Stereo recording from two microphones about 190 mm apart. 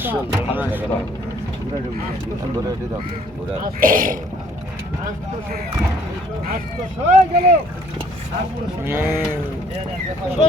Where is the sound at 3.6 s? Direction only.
45° right (ahead or behind).